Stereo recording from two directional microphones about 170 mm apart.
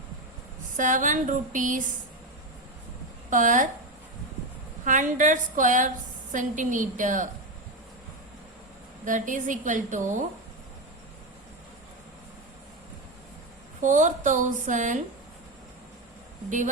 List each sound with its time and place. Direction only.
0.8 s a woman's voice: 50° right (ahead or behind)
3.2 s a woman's voice: 50° right (ahead or behind)
4.9 s a woman's voice: 50° right (ahead or behind)
9.0 s a woman's voice: 50° right (ahead or behind)
13.8 s a woman's voice: 45° right (ahead or behind)